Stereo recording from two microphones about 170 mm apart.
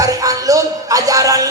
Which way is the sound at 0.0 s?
20° right (ahead or behind).